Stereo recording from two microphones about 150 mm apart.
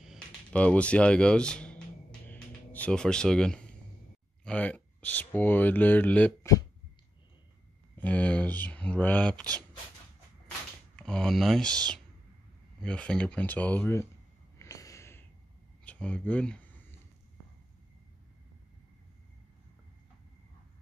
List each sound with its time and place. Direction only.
0.5 s a sound: 10° left (ahead or behind)
4.5 s speech: 10° left (ahead or behind)
8.0 s speech: 10° left (ahead or behind)
11.0 s speech: 5° left (ahead or behind)
14.6 s snort: 20° left (ahead or behind)
15.8 s speech: 10° left (ahead or behind)